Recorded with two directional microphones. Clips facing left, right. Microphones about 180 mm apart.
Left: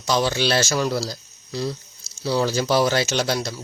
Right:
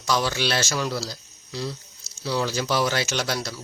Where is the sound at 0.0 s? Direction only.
25° left (ahead or behind).